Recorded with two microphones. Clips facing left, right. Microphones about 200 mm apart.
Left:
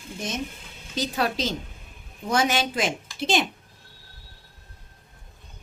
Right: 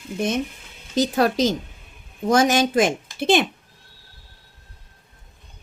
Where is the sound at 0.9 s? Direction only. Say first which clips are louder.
Right 7 dB; 45° right (ahead or behind).